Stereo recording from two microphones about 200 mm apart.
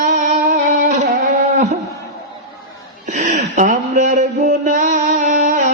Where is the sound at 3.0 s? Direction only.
40° right (ahead or behind).